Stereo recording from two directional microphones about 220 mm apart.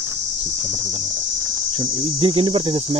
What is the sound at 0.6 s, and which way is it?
Cricket, 15° right (ahead or behind).